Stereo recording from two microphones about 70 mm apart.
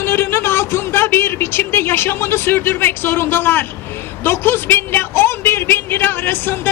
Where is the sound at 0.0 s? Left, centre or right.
Left.